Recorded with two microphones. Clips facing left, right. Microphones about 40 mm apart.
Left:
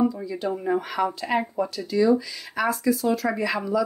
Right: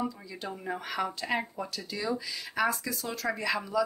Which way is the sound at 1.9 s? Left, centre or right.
Centre.